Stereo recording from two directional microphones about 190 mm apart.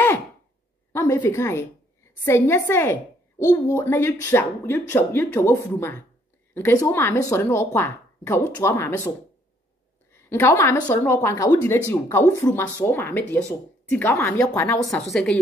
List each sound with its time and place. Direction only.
0.9 s a woman's voice: 10° left (ahead or behind)
10.1 s a woman's voice: 10° left (ahead or behind)